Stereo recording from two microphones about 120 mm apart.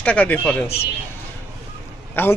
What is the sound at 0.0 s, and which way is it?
Speech, 15° left (ahead or behind).